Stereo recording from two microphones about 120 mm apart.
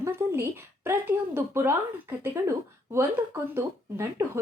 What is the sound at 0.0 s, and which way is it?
Speech, 20° right (ahead or behind).